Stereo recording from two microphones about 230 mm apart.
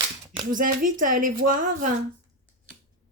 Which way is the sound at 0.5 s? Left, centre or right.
Right.